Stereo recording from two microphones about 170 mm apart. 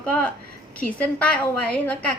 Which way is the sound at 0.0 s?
10° left (ahead or behind).